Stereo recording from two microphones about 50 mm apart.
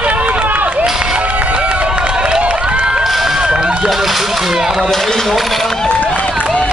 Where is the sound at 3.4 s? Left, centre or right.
Centre.